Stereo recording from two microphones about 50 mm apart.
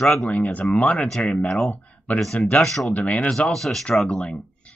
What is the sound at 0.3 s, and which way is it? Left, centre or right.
Speech, left.